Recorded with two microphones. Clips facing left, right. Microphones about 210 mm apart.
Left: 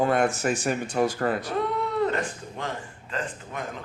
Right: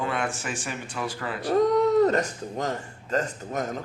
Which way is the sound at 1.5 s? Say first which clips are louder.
Right 7 dB; 40° right (ahead or behind).